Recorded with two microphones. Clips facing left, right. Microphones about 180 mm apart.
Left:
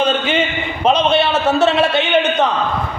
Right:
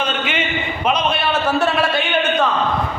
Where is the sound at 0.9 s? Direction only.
25° left (ahead or behind).